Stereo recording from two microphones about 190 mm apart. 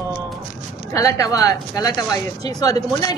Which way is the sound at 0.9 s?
15° left (ahead or behind).